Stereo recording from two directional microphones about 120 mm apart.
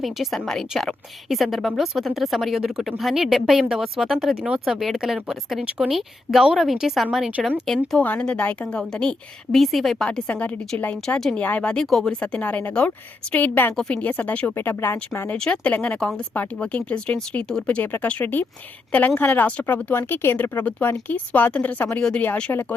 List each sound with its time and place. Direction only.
0.0 s speech: centre (ahead or behind)
8.0 s speech: 10° left (ahead or behind)
15.4 s speech: 10° left (ahead or behind)